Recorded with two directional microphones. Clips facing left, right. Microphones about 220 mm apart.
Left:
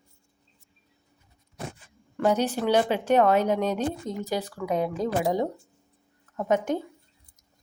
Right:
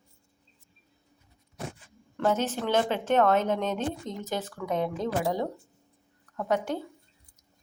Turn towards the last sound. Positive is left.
turn(degrees=20)  # may be behind; listen again after turning